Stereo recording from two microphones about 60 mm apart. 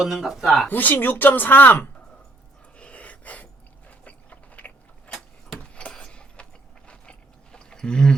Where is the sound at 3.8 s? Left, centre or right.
Left.